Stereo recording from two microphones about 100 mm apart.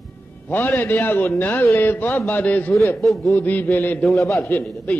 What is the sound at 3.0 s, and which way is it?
Speech, centre (ahead or behind).